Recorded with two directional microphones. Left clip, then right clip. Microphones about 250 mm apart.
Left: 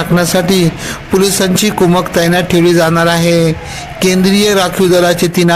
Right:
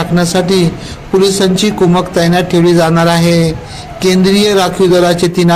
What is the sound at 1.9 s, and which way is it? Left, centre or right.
Speech, left.